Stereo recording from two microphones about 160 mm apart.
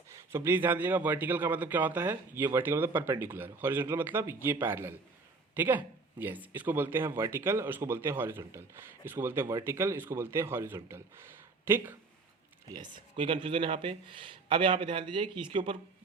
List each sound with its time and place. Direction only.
0.3 s speech: 15° right (ahead or behind)
12.7 s speech: 30° right (ahead or behind)